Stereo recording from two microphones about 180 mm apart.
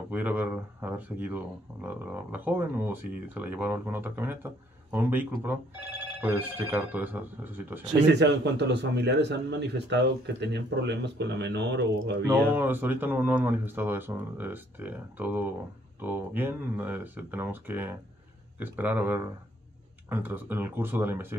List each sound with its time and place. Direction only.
0.1 s speech: 10° right (ahead or behind)
8.1 s a man's voice: 75° right (ahead or behind)
12.3 s speech: 10° right (ahead or behind)